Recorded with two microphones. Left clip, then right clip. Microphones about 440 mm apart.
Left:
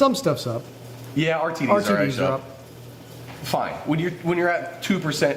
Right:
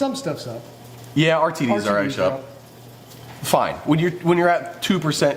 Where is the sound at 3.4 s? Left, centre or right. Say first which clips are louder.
Right 6 dB; right.